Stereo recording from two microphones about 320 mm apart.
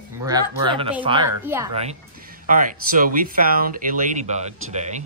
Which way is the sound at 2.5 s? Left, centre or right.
Right.